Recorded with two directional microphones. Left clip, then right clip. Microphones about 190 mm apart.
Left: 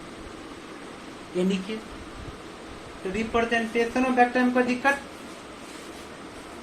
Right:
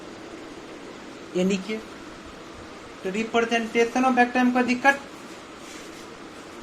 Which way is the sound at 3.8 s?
45° right (ahead or behind).